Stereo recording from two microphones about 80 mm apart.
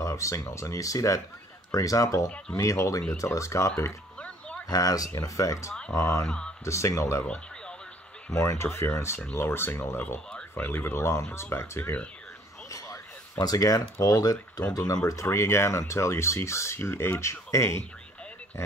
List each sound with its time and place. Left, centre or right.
0.0 s speech: left
4.2 s a sound: centre
4.6 s speech: left
6.2 s speech: centre
6.6 s speech: left
8.3 s speech: left
12.6 s speech: left
15.0 s speech: left